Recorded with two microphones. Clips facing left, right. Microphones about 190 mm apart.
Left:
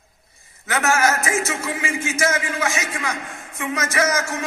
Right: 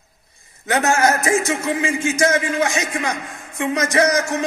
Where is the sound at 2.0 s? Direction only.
35° right (ahead or behind).